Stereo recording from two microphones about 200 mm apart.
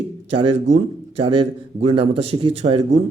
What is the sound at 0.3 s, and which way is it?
A man's voice, 30° right (ahead or behind).